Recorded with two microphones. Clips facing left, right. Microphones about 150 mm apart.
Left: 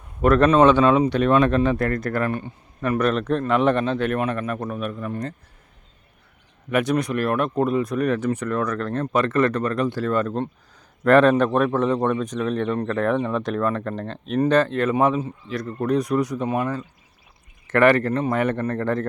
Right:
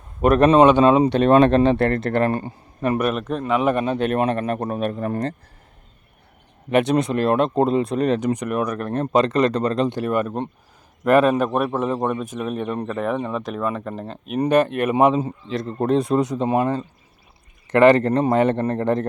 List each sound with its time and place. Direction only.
0.2 s speech: 20° right (ahead or behind); by 2.6 s 35° right (ahead or behind)
3.0 s a man's voice: 5° right (ahead or behind)
4.2 s speech: 30° right (ahead or behind)
4.5 s a man's voice: 40° right (ahead or behind)
6.7 s a man's voice: 25° right (ahead or behind)